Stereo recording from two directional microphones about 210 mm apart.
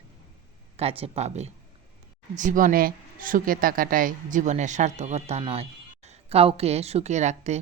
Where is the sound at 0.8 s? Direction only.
30° right (ahead or behind).